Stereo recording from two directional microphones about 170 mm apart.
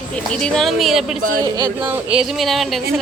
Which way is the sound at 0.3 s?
5° left (ahead or behind).